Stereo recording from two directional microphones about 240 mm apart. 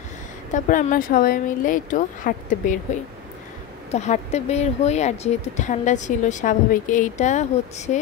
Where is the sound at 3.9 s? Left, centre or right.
Left.